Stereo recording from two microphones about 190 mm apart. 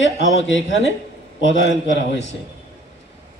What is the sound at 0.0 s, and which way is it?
Speech, 75° left (ahead or behind).